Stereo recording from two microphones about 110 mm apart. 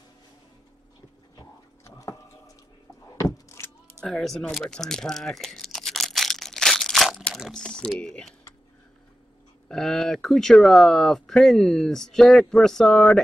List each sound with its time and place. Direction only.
1.4 s a sound: 30° left (ahead or behind)
4.0 s crunch: 5° left (ahead or behind)
7.3 s speech: centre (ahead or behind)
7.6 s speech: 10° left (ahead or behind)
9.7 s speech: 5° left (ahead or behind)